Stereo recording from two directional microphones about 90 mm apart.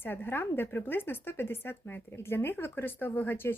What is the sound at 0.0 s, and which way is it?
Speech, 25° left (ahead or behind).